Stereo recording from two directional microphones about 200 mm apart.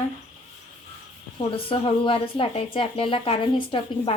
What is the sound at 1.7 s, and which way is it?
Speech, 25° left (ahead or behind).